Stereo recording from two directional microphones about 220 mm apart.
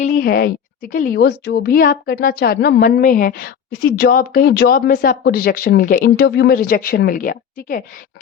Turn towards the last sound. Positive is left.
turn(degrees=40)  # may be behind; listen again after turning